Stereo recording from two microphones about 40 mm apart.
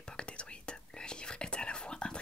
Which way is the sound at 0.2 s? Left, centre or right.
Left.